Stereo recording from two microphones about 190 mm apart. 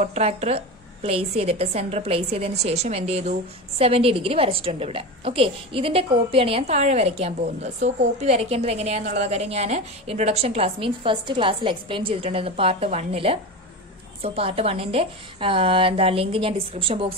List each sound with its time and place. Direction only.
0.0 s a woman's voice: 35° right (ahead or behind)